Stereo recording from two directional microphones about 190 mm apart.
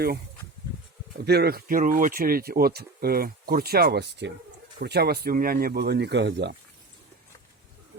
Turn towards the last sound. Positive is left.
turn(degrees=-65)  # may be behind; listen again after turning